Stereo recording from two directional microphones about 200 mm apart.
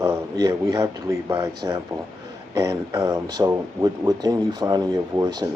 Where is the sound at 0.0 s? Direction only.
15° right (ahead or behind).